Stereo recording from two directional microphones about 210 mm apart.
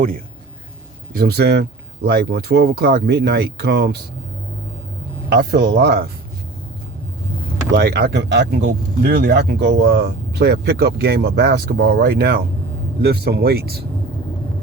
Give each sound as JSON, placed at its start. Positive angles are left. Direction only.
{"t": 1.1, "sound": "speech", "side_deg": -45}
{"t": 5.3, "sound": "speech", "side_deg": -50}
{"t": 7.8, "sound": "speech", "side_deg": -50}